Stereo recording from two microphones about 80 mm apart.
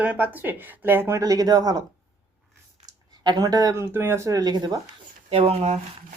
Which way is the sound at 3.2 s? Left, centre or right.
Right.